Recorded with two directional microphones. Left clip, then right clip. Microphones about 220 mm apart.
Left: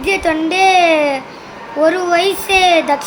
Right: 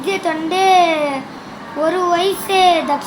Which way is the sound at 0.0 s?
30° left (ahead or behind).